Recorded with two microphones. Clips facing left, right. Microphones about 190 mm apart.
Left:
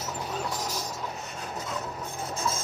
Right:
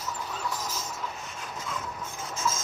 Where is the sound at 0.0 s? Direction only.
30° left (ahead or behind).